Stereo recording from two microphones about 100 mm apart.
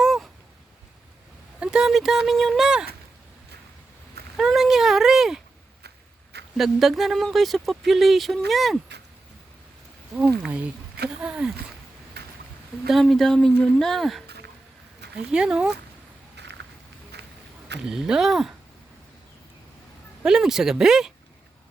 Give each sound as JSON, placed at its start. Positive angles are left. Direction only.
{"t": 0.0, "sound": "a sound", "side_deg": 0}
{"t": 1.5, "sound": "speech", "side_deg": -10}
{"t": 4.4, "sound": "speech", "side_deg": -5}
{"t": 6.6, "sound": "speech", "side_deg": 0}
{"t": 11.2, "sound": "speech", "side_deg": -10}
{"t": 12.9, "sound": "speech", "side_deg": 0}
{"t": 15.3, "sound": "speech", "side_deg": -5}
{"t": 17.7, "sound": "speech", "side_deg": -5}
{"t": 20.2, "sound": "speech", "side_deg": -5}